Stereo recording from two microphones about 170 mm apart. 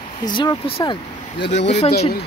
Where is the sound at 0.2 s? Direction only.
25° left (ahead or behind).